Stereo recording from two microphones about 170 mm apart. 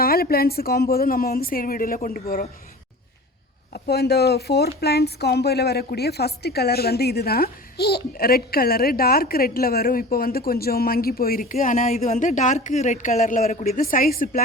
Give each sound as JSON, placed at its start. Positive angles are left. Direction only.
{"t": 0.0, "sound": "a woman's voice", "side_deg": 65}
{"t": 3.7, "sound": "a woman's voice", "side_deg": 70}